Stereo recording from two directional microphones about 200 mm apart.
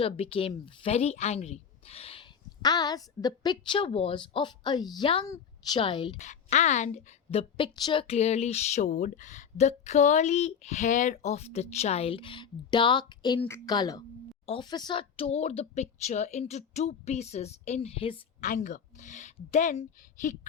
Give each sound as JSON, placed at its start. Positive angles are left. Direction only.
{"t": 0.0, "sound": "a woman's voice", "side_deg": 25}
{"t": 6.1, "sound": "a woman's voice", "side_deg": 35}
{"t": 18.4, "sound": "a woman's voice", "side_deg": 40}